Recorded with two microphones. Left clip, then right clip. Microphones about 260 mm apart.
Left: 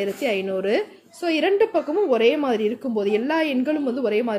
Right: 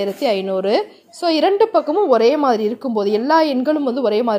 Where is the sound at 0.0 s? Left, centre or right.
Centre.